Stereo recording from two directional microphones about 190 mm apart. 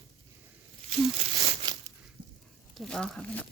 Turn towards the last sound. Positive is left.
turn(degrees=5)  # may be behind; listen again after turning